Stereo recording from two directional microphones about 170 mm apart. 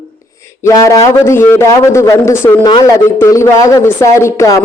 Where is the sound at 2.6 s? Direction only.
25° left (ahead or behind).